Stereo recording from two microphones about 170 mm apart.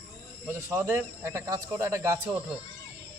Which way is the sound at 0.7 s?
15° right (ahead or behind).